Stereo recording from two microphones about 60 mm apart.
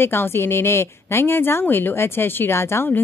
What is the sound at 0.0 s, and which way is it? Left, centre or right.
A woman's voice, left.